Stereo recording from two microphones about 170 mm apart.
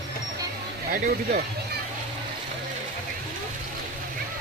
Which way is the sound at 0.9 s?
60° right (ahead or behind).